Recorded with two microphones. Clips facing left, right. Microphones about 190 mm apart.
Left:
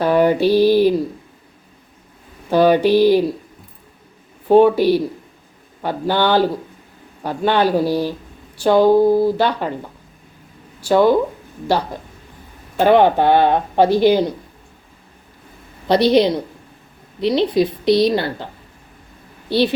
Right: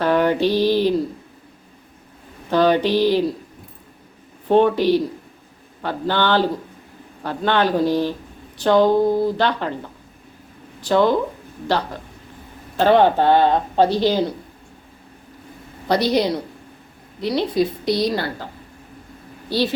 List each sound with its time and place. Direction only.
0.0 s a sound: 10° left (ahead or behind)
2.5 s speech: 10° left (ahead or behind)
4.4 s speech: 10° left (ahead or behind)
10.8 s speech: 10° left (ahead or behind)
12.8 s speech: 15° left (ahead or behind)
15.9 s a woman's voice: 20° left (ahead or behind)
19.5 s a woman's voice: 20° left (ahead or behind)